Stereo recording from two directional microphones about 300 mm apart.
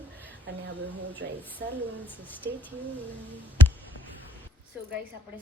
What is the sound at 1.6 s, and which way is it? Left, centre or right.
Speech, right.